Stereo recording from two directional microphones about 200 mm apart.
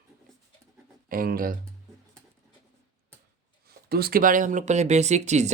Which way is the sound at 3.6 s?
50° right (ahead or behind).